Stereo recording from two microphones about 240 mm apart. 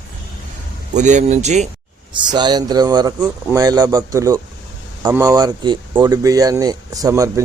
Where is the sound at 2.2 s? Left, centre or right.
Centre.